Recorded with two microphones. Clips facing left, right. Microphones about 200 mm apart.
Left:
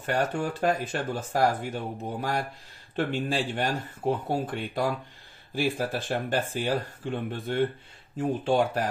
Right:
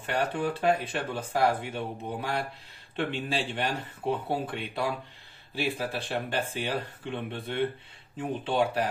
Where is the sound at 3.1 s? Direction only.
45° left (ahead or behind).